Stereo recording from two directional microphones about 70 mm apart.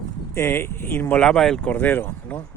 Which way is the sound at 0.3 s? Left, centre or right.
Left.